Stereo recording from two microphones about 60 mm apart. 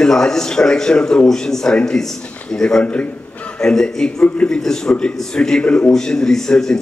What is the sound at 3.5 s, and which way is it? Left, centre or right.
A man's voice, centre.